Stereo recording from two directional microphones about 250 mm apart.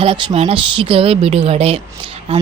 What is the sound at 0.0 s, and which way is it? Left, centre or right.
Speech, centre.